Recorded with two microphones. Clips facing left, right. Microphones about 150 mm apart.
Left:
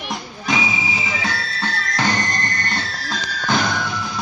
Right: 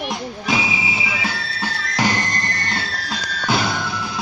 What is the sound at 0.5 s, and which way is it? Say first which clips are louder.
Music: left 1 dB; 5° right (ahead or behind).